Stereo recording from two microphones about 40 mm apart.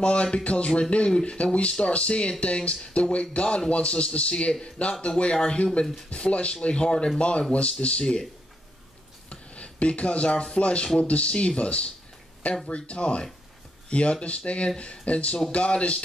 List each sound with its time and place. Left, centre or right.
0.0 s speech: left
9.3 s speech: left